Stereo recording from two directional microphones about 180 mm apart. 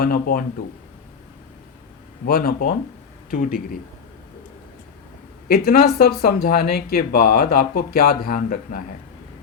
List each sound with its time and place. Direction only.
0.0 s speech: 55° left (ahead or behind)
2.2 s speech: 55° left (ahead or behind)
5.5 s speech: 55° left (ahead or behind)